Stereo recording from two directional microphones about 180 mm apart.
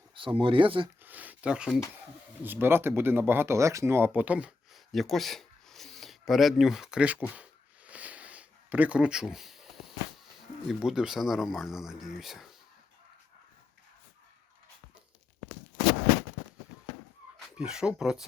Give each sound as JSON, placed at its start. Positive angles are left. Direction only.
{"t": 0.1, "sound": "speech", "side_deg": -30}
{"t": 1.0, "sound": "speech", "side_deg": -10}
{"t": 7.9, "sound": "a sound", "side_deg": -10}
{"t": 10.7, "sound": "speech", "side_deg": -5}
{"t": 17.6, "sound": "speech", "side_deg": -5}